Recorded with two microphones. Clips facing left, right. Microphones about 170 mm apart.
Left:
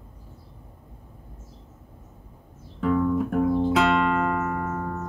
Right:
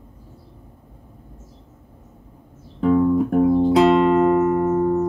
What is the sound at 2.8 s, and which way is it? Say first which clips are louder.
Music: right 6 dB; 25° right (ahead or behind).